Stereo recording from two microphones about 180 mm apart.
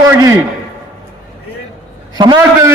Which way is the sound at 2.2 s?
25° right (ahead or behind).